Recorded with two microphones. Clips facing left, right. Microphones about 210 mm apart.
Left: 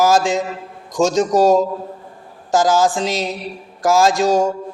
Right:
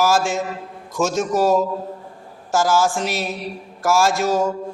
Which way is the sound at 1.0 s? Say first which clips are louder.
Left 5 dB; 30° left (ahead or behind).